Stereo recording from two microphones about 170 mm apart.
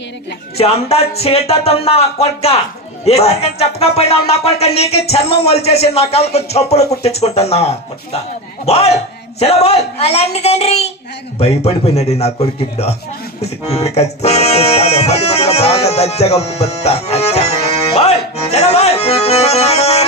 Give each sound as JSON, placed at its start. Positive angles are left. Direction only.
{"t": 0.5, "sound": "speech", "side_deg": 35}
{"t": 13.7, "sound": "music", "side_deg": 35}